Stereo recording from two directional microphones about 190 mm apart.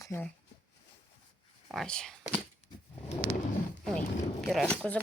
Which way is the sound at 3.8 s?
5° left (ahead or behind).